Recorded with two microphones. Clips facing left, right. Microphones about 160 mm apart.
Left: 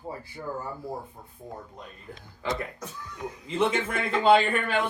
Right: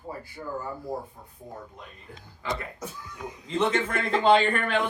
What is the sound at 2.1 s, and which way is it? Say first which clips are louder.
Speech: left 1 dB; 20° left (ahead or behind).